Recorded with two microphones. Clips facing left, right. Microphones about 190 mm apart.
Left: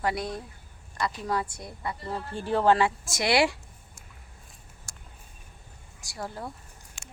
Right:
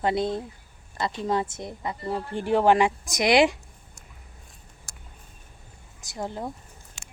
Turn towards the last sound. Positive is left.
turn(degrees=-20)  # may be behind; listen again after turning